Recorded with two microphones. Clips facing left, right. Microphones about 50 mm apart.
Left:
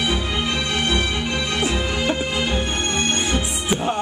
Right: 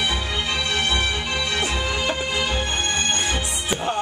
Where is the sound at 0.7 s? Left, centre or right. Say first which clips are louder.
Left 1 dB; left.